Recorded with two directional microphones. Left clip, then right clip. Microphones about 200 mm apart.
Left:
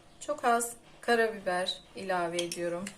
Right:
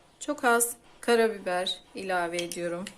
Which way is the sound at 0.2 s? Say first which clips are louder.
Right 3 dB; 55° right (ahead or behind).